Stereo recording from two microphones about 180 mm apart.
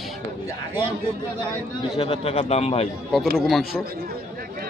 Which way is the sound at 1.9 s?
30° left (ahead or behind).